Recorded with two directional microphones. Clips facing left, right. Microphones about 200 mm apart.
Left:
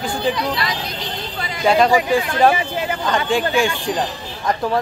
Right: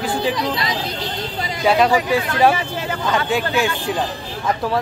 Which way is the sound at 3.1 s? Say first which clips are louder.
Left 1 dB; 5° right (ahead or behind).